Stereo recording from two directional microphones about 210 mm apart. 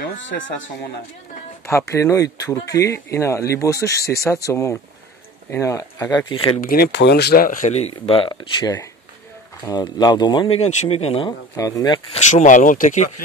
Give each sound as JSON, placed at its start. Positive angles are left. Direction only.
{"t": 0.3, "sound": "speech", "side_deg": 50}
{"t": 1.7, "sound": "speech", "side_deg": 15}
{"t": 6.6, "sound": "speech", "side_deg": 45}
{"t": 12.2, "sound": "speech", "side_deg": 35}